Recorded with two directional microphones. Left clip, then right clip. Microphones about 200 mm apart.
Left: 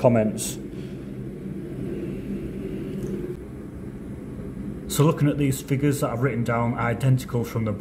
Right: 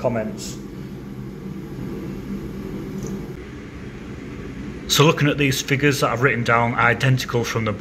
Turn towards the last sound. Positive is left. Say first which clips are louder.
# right 6 dB
turn(degrees=5)  # may be behind; listen again after turning